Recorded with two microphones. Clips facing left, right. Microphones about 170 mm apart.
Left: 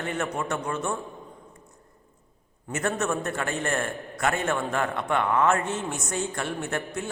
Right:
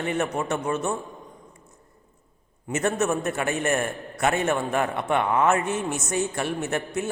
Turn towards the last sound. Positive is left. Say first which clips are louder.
# right 3 dB
turn(degrees=-20)  # may be behind; listen again after turning